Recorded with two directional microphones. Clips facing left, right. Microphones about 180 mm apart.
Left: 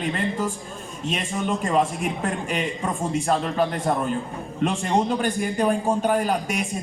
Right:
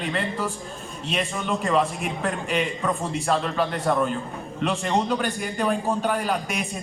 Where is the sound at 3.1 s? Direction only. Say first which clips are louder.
Left 1 dB; 45° left (ahead or behind).